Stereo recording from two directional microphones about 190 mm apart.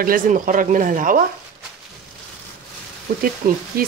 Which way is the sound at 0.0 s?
45° right (ahead or behind).